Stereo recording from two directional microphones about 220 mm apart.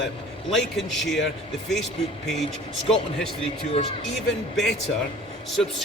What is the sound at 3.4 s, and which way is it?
Speech, 25° left (ahead or behind).